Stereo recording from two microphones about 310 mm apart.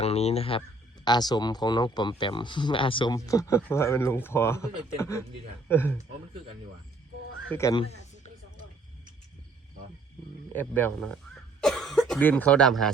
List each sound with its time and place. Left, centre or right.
0.0 s speech: centre
7.4 s speech: centre
10.5 s speech: centre